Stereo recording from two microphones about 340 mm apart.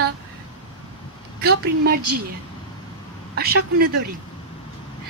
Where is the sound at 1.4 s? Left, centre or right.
Right.